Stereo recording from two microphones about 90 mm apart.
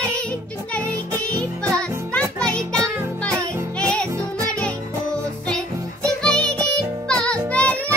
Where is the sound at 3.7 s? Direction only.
15° left (ahead or behind).